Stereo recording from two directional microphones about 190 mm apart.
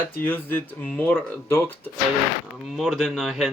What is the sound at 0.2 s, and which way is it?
Speech, 10° left (ahead or behind).